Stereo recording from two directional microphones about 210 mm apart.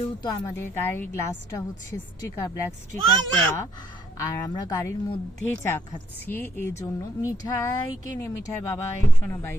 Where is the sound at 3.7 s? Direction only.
15° left (ahead or behind).